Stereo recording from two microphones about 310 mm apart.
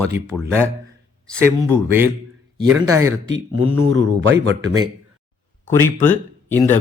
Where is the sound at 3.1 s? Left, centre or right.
Right.